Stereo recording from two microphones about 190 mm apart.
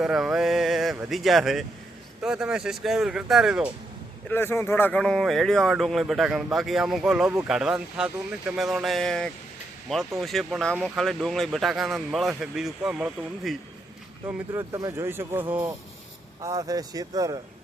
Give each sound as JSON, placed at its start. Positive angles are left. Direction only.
{"t": 0.0, "sound": "a sound", "side_deg": -5}
{"t": 1.1, "sound": "speech", "side_deg": 0}
{"t": 4.3, "sound": "speech", "side_deg": 10}